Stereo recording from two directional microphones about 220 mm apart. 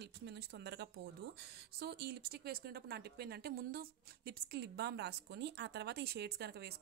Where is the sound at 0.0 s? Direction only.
50° right (ahead or behind).